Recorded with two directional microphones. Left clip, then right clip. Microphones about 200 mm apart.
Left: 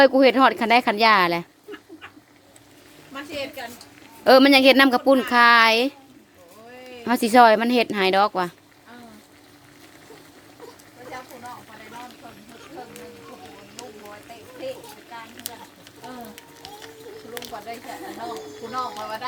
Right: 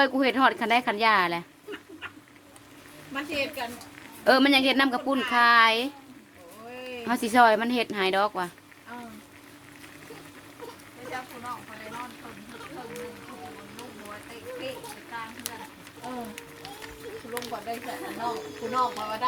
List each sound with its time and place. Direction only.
0.0 s speech: 40° left (ahead or behind)
4.2 s speech: 45° left (ahead or behind)
7.1 s speech: 45° left (ahead or behind)
15.4 s a sound: 5° left (ahead or behind)